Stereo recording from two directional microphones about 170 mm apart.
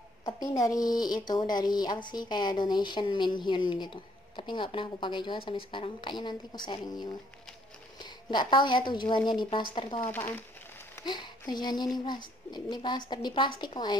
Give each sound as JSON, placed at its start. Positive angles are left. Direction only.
{"t": 0.2, "sound": "a woman's voice", "side_deg": 20}
{"t": 10.0, "sound": "speech", "side_deg": 10}
{"t": 11.0, "sound": "a woman's voice", "side_deg": 25}